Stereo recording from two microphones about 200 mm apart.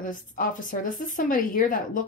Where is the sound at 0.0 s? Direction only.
40° left (ahead or behind).